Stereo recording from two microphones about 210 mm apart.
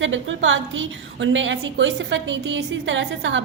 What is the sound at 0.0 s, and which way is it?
A woman's voice, 65° right (ahead or behind).